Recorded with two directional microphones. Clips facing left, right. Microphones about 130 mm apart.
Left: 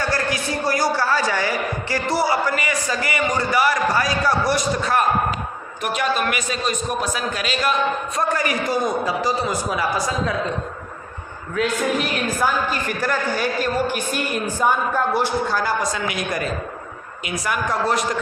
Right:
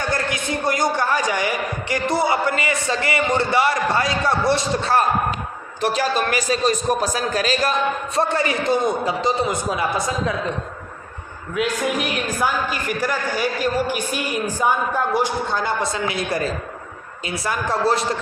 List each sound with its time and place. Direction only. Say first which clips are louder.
0.1 s a man's voice: even; 20° right (ahead or behind)
12.9 s speech: right 1 dB; 10° right (ahead or behind)
15.4 s a man's voice: left 1 dB; 25° right (ahead or behind)